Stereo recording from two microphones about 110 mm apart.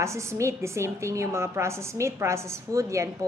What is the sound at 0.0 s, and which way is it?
A woman's voice, 25° right (ahead or behind).